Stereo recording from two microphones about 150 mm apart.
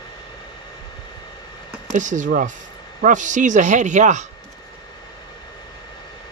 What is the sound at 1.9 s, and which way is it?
Speech, 55° right (ahead or behind).